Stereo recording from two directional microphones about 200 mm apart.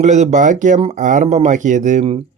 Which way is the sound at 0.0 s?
35° right (ahead or behind).